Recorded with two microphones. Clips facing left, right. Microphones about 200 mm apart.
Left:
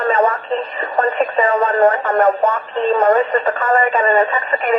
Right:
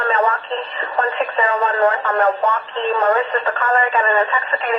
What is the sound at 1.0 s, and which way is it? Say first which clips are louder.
Speech: left 3 dB; 10° left (ahead or behind).